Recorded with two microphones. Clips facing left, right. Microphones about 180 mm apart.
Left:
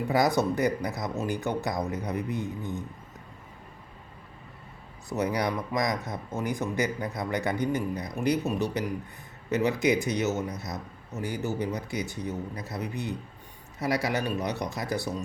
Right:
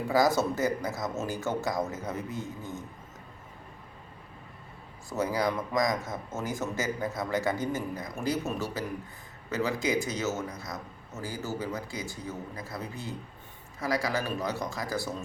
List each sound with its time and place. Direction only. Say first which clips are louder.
0.1 s a man's voice: even; 20° left (ahead or behind)
5.0 s a man's voice: left 1 dB; 20° left (ahead or behind)